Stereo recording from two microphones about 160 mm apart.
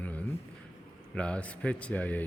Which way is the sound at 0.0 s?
10° left (ahead or behind).